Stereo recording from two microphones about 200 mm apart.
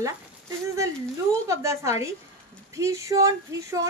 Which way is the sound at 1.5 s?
15° right (ahead or behind).